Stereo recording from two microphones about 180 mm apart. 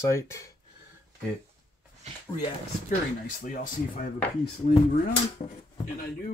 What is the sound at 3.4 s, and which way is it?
Speech, 50° left (ahead or behind).